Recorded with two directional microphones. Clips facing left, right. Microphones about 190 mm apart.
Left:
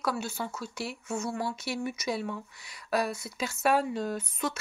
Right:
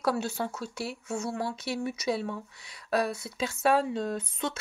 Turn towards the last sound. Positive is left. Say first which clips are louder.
# even
turn(degrees=-30)  # may be behind; listen again after turning